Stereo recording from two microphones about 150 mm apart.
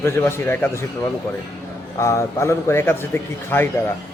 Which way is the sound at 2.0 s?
20° left (ahead or behind).